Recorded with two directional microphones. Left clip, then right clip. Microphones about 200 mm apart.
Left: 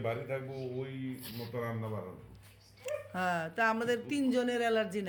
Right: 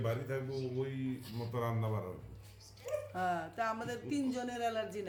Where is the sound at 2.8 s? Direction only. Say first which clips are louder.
Left 2 dB; 40° left (ahead or behind).